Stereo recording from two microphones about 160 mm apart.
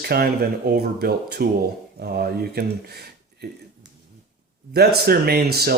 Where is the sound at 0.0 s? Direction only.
75° right (ahead or behind).